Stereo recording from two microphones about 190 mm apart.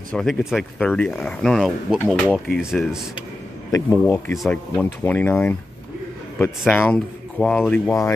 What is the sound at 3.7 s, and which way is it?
Speech, 15° left (ahead or behind).